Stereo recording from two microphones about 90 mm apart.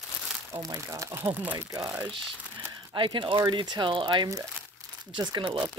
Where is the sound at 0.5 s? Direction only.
40° right (ahead or behind).